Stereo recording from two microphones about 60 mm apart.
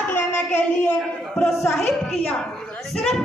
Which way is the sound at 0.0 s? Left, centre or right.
Left.